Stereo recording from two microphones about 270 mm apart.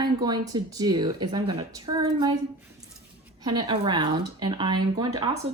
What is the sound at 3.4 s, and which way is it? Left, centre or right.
A woman's voice, centre.